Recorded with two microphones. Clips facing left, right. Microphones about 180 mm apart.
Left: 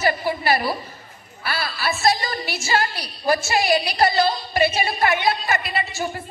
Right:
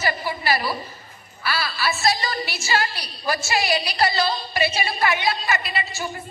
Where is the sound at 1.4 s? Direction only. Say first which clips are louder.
Right 1 dB; 50° left (ahead or behind).